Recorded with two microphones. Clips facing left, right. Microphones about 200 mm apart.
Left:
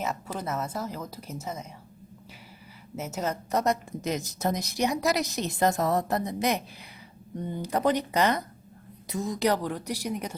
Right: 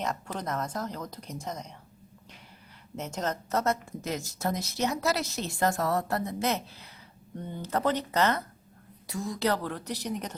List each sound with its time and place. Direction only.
0.0 s speech: 5° left (ahead or behind)
2.9 s a woman's voice: 5° left (ahead or behind)